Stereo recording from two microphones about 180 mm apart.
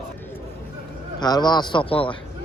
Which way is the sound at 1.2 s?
25° left (ahead or behind).